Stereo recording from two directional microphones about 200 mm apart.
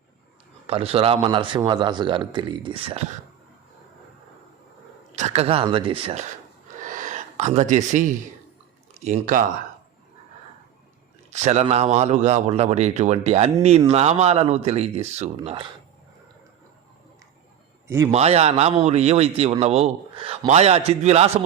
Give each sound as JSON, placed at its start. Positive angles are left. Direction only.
{"t": 0.7, "sound": "speech", "side_deg": -30}
{"t": 5.1, "sound": "speech", "side_deg": -35}
{"t": 6.7, "sound": "gasp", "side_deg": -40}
{"t": 9.0, "sound": "speech", "side_deg": -35}
{"t": 11.3, "sound": "a man's voice", "side_deg": -35}
{"t": 17.8, "sound": "a man's voice", "side_deg": -15}
{"t": 18.1, "sound": "speech", "side_deg": -30}